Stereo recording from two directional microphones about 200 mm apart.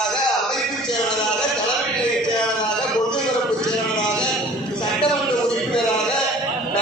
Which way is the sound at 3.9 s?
5° left (ahead or behind).